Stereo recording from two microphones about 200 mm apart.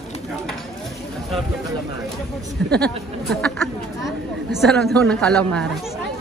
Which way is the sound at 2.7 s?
5° left (ahead or behind).